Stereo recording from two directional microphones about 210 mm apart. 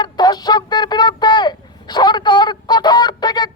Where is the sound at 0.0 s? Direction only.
20° left (ahead or behind).